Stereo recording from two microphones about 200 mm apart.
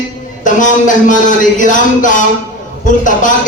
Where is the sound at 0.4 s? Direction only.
40° left (ahead or behind).